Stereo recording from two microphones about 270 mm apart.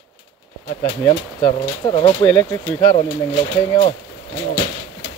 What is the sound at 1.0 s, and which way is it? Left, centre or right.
Speech, centre.